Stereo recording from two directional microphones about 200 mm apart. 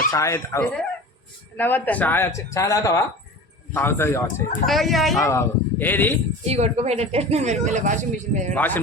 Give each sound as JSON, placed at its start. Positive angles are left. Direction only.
{"t": 0.1, "sound": "speech", "side_deg": 15}
{"t": 4.6, "sound": "speech", "side_deg": 0}
{"t": 5.2, "sound": "speech", "side_deg": 15}
{"t": 6.4, "sound": "a woman's voice", "side_deg": -30}
{"t": 8.5, "sound": "speech", "side_deg": 10}